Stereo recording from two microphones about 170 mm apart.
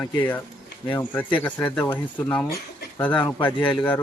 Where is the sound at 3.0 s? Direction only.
10° left (ahead or behind).